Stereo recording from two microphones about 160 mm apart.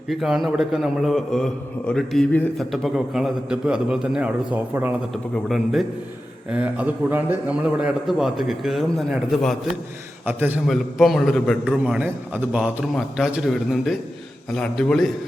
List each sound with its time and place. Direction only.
0.1 s a man's voice: centre (ahead or behind)
5.1 s a man's voice: centre (ahead or behind)
10.2 s a man's voice: 10° right (ahead or behind)
10.7 s a man's voice: centre (ahead or behind)